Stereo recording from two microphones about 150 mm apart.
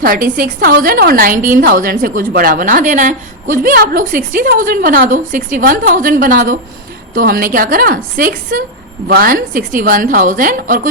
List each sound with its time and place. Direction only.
0.0 s a woman's voice: 70° right (ahead or behind)
9.0 s a woman's voice: 80° right; by 10.8 s 65° right (ahead or behind)